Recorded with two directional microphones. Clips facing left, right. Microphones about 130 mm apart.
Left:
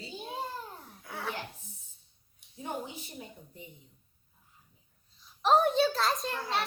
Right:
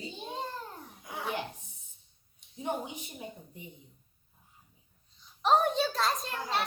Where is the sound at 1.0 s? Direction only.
15° right (ahead or behind).